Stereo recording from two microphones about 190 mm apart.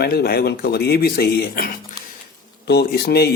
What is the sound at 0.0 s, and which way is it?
Speech, 55° left (ahead or behind).